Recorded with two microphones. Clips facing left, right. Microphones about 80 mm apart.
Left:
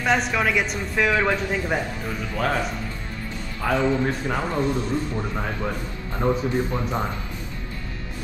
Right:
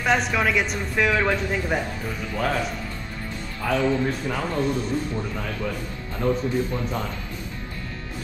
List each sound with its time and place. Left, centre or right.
0.0 s speech: centre
3.6 s speech: centre